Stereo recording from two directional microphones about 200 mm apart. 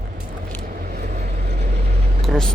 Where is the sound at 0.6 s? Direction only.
45° right (ahead or behind).